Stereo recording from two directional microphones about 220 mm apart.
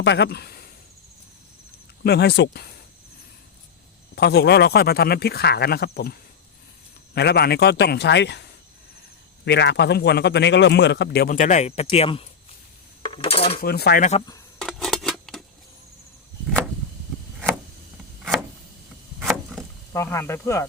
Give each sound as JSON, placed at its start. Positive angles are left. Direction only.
{"t": 0.0, "sound": "speech", "side_deg": 50}
{"t": 2.0, "sound": "a man's voice", "side_deg": 50}
{"t": 4.1, "sound": "a man's voice", "side_deg": 50}
{"t": 13.0, "sound": "cutlery", "side_deg": 25}
{"t": 13.6, "sound": "a man's voice", "side_deg": 45}
{"t": 14.6, "sound": "scissors", "side_deg": 0}
{"t": 19.2, "sound": "a sound", "side_deg": 0}
{"t": 19.9, "sound": "speech", "side_deg": 10}